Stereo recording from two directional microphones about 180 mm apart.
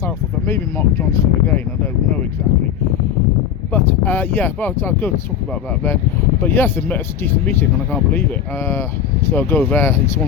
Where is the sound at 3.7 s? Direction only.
10° left (ahead or behind).